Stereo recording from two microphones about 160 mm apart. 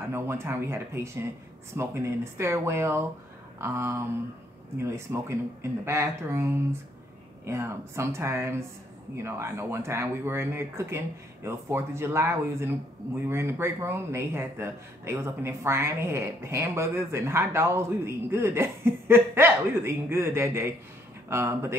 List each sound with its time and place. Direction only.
0.1 s speech: 15° right (ahead or behind)